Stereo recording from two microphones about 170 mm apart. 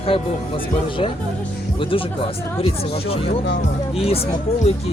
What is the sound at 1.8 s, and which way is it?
Speech, 30° left (ahead or behind).